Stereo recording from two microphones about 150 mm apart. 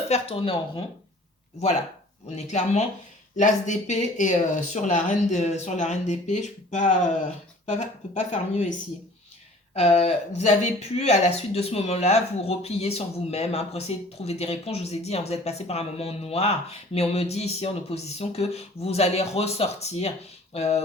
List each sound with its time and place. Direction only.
0.1 s speech: 40° left (ahead or behind)
2.3 s speech: 45° left (ahead or behind)
9.7 s speech: 45° left (ahead or behind)